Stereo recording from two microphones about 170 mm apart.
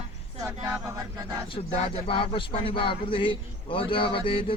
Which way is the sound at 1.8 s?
30° left (ahead or behind).